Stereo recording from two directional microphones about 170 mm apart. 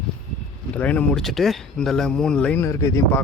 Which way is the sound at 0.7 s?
10° left (ahead or behind).